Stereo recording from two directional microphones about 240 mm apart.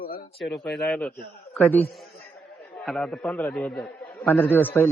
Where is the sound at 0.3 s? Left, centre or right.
Centre.